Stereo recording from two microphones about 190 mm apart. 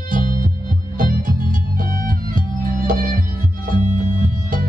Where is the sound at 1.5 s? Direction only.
50° right (ahead or behind).